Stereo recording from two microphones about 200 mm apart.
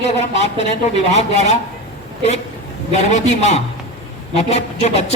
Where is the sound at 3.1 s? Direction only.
35° left (ahead or behind).